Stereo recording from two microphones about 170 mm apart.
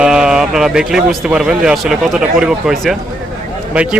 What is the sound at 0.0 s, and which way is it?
A man's voice, 5° right (ahead or behind).